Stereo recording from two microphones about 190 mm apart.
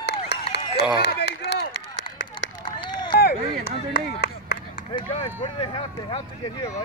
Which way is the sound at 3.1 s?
55° left (ahead or behind).